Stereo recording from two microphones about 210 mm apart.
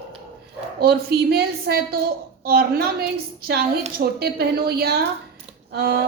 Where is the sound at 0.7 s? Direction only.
50° right (ahead or behind).